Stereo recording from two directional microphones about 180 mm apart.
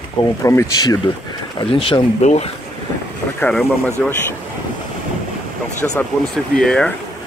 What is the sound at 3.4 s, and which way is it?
Speech, 5° left (ahead or behind).